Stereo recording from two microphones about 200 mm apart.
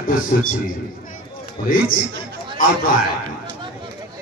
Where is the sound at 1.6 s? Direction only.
45° left (ahead or behind).